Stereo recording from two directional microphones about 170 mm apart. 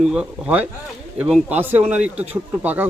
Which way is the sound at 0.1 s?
5° right (ahead or behind).